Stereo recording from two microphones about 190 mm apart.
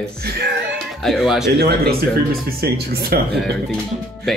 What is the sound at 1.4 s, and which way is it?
Speech, 55° right (ahead or behind).